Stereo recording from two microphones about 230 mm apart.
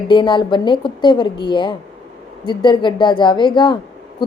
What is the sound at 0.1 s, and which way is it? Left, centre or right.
A woman's voice, left.